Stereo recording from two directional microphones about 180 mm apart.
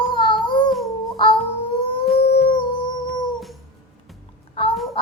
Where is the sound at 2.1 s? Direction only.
35° left (ahead or behind).